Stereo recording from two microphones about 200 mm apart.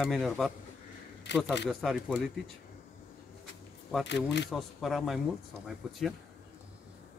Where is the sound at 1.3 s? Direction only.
60° left (ahead or behind).